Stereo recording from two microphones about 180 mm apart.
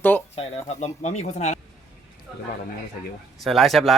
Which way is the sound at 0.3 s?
35° left (ahead or behind).